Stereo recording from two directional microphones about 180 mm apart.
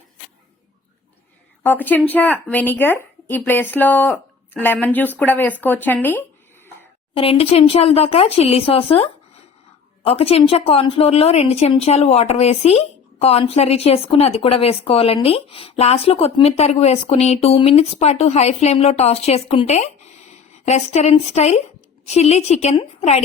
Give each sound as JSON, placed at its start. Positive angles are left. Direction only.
{"t": 1.6, "sound": "a woman's voice", "side_deg": 10}
{"t": 7.1, "sound": "speech", "side_deg": 30}